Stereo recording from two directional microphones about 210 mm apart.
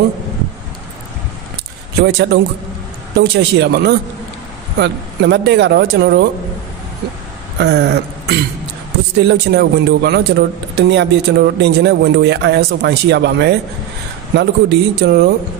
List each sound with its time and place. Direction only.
2.0 s speech: 55° right (ahead or behind)
7.5 s throat clearing: 55° right (ahead or behind)
9.3 s speech: 55° right (ahead or behind)